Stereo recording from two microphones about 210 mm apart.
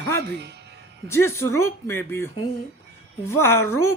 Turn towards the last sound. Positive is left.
turn(degrees=10)  # may be behind; listen again after turning